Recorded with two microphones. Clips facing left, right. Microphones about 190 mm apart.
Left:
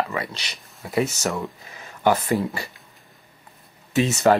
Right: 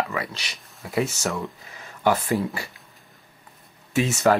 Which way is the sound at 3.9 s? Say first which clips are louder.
Left 2 dB; 20° left (ahead or behind).